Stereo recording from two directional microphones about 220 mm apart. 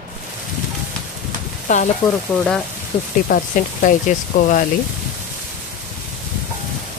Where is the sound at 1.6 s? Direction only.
35° left (ahead or behind).